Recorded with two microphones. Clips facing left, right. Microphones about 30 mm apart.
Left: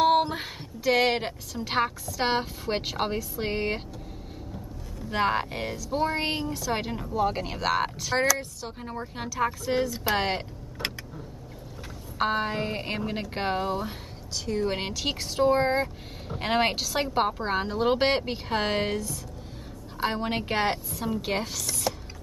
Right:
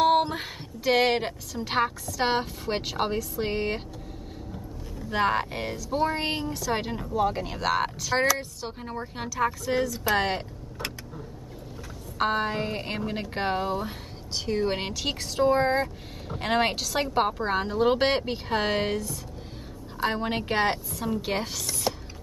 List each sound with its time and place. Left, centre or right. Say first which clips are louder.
0.0 s a sound: even; centre
0.8 s speech: right 1 dB; centre
5.1 s a woman's voice: right 1 dB; centre
9.3 s a woman's voice: right 1 dB; centre
9.8 s a woman's voice: right 1 dB; centre
12.2 s speech: right 1 dB; centre
14.3 s a woman's voice: right 1 dB; right
14.7 s speech: even; centre